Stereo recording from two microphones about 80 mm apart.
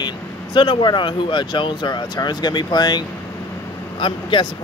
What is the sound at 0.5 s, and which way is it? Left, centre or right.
Speech, left.